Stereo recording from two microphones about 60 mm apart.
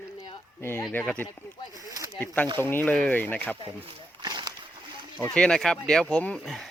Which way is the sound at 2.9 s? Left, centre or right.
Left.